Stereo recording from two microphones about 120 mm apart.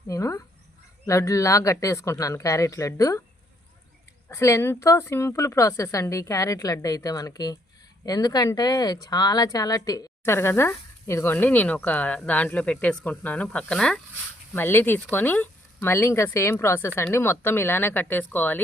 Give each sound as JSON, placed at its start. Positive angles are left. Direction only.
{"t": 0.1, "sound": "a sound", "side_deg": 25}
{"t": 1.0, "sound": "speech", "side_deg": 25}
{"t": 4.3, "sound": "speech", "side_deg": 25}
{"t": 14.5, "sound": "speech", "side_deg": 20}